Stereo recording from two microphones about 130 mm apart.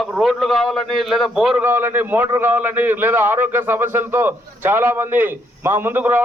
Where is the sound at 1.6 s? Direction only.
15° right (ahead or behind).